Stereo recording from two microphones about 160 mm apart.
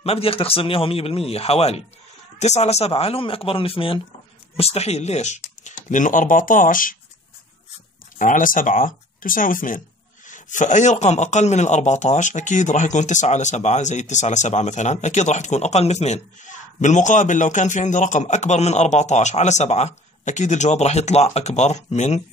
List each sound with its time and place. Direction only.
0.0 s a man's voice: 35° left (ahead or behind); by 7.0 s 60° left (ahead or behind)
8.2 s a man's voice: 55° left (ahead or behind)